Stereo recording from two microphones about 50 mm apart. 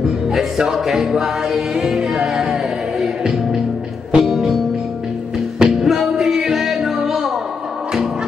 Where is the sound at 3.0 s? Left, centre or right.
Centre.